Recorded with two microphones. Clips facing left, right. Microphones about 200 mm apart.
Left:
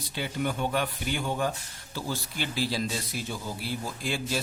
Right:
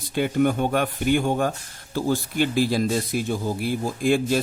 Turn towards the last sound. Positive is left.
turn(degrees=-50)  # may be behind; listen again after turning